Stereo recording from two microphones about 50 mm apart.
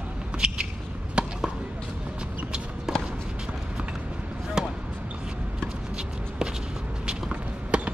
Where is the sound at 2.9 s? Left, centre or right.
Centre.